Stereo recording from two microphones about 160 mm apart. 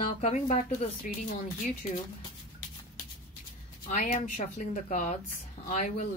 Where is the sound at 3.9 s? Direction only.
50° left (ahead or behind).